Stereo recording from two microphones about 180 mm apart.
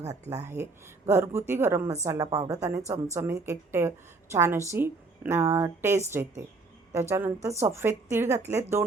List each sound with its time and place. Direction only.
0.4 s a woman's voice: 15° right (ahead or behind)